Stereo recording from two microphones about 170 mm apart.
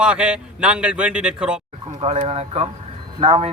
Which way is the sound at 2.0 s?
35° right (ahead or behind).